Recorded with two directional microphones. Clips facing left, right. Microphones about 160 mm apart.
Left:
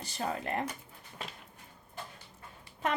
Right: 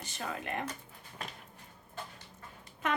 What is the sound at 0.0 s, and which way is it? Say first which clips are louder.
Speech: left 4 dB; 35° left (ahead or behind).